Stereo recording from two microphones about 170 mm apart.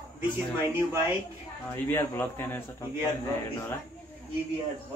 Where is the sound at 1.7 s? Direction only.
15° left (ahead or behind).